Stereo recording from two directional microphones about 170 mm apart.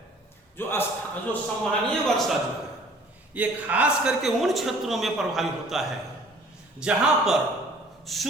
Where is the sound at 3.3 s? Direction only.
10° right (ahead or behind).